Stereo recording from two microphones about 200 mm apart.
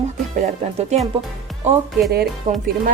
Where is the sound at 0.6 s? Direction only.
35° right (ahead or behind).